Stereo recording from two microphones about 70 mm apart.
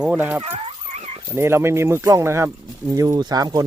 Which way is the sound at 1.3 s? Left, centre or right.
Right.